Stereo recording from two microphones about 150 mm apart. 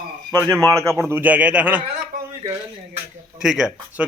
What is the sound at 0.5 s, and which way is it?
A man's voice, 20° right (ahead or behind).